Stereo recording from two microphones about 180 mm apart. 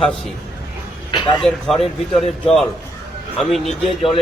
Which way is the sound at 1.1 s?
25° left (ahead or behind).